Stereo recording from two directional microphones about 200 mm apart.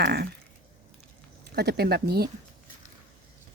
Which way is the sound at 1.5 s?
55° right (ahead or behind).